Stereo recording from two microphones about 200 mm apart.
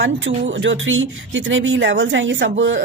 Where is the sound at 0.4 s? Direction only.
70° right (ahead or behind).